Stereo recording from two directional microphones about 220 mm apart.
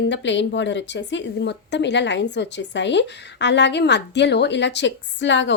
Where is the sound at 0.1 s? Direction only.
55° left (ahead or behind).